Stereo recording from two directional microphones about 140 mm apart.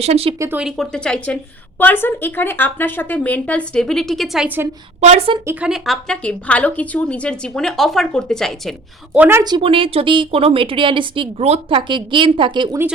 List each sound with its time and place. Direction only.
0.0 s speech: 45° right (ahead or behind)
0.3 s a woman's voice: 20° right (ahead or behind)
0.6 s speech: 5° left (ahead or behind)
4.4 s a woman's voice: 15° right (ahead or behind)
4.9 s speech: 50° right (ahead or behind)
5.5 s speech: 5° right (ahead or behind)
9.1 s a woman's voice: 10° right (ahead or behind)
9.4 s a woman's voice: 35° right (ahead or behind)
11.8 s a woman's voice: 35° right (ahead or behind)